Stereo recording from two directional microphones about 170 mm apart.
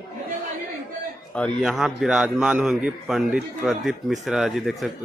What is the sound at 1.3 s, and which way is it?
A man's voice, centre (ahead or behind).